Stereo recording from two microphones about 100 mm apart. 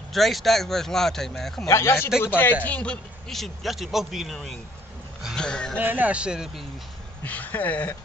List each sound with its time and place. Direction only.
0.1 s a man's voice: centre (ahead or behind)
1.7 s a man's voice: 25° left (ahead or behind); by 5.8 s 10° left (ahead or behind)
5.8 s a man's voice: 20° right (ahead or behind)
7.2 s speech: 15° left (ahead or behind)